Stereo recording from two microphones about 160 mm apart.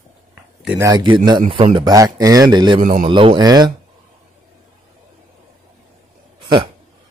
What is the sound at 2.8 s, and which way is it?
Speech, 50° right (ahead or behind).